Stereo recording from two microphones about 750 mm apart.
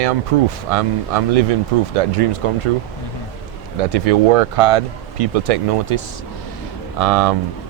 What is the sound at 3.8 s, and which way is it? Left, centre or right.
Speech, right.